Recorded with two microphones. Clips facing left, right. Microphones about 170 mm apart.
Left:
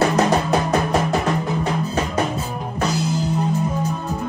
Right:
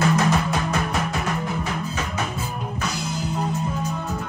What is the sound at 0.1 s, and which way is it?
Music, 35° left (ahead or behind).